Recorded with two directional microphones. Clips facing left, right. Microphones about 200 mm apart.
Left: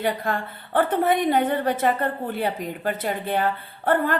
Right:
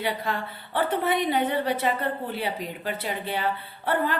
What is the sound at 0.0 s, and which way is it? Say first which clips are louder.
A woman's voice: left 4 dB; 50° left (ahead or behind).